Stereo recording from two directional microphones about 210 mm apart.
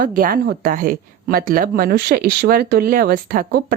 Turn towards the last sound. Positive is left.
turn(degrees=-45)  # may be behind; listen again after turning